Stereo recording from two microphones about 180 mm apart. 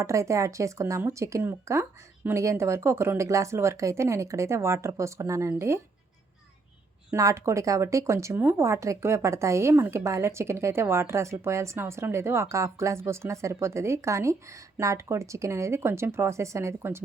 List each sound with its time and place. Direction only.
0.0 s speech: 15° right (ahead or behind)
7.1 s speech: 15° right (ahead or behind)